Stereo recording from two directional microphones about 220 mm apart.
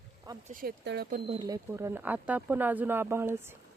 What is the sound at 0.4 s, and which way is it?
Speech, 40° right (ahead or behind).